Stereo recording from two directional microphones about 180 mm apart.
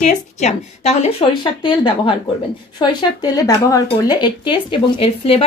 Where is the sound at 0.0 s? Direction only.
40° left (ahead or behind).